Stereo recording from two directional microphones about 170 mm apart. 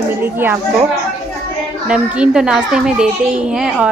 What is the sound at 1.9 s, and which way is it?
A child's voice, 5° right (ahead or behind).